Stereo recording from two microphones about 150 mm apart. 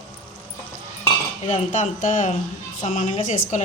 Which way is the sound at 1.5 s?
55° left (ahead or behind).